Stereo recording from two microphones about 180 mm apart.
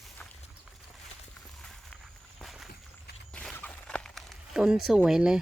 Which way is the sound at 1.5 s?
5° left (ahead or behind).